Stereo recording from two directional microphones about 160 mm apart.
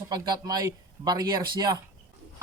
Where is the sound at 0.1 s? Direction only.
25° right (ahead or behind).